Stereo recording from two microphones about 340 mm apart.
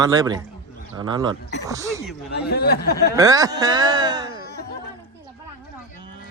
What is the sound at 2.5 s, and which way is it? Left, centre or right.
Speech, left.